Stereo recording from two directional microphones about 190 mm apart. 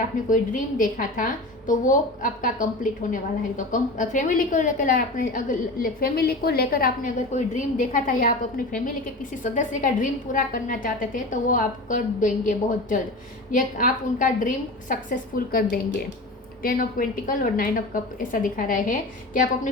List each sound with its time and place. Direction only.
0.3 s a woman's voice: 45° left (ahead or behind)